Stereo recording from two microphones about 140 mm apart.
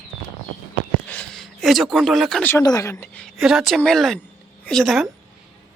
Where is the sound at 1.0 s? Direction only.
10° left (ahead or behind).